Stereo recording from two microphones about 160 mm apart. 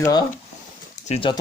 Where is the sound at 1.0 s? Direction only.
40° left (ahead or behind).